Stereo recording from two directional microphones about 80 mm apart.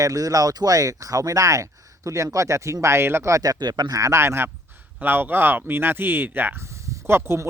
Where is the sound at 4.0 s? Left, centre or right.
Right.